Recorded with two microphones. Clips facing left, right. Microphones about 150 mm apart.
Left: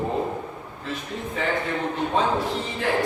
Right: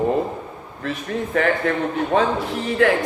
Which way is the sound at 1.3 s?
75° right (ahead or behind).